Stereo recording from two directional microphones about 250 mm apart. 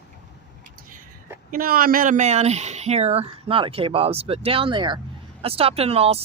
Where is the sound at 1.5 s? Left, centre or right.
Right.